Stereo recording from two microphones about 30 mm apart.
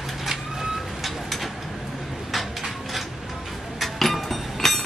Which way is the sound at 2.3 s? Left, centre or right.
Centre.